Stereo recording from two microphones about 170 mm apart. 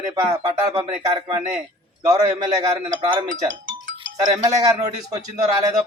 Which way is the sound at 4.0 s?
25° right (ahead or behind).